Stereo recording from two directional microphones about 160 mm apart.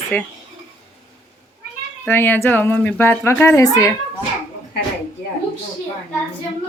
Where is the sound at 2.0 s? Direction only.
10° left (ahead or behind).